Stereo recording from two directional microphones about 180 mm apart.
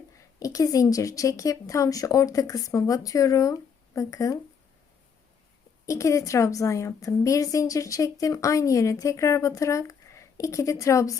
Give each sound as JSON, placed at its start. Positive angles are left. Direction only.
{"t": 0.3, "sound": "a woman's voice", "side_deg": 20}
{"t": 5.8, "sound": "a woman's voice", "side_deg": 15}